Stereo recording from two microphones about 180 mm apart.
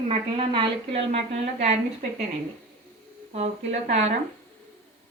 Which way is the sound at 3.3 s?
40° right (ahead or behind).